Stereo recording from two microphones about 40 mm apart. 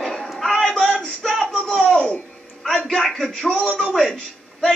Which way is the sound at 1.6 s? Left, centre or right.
Left.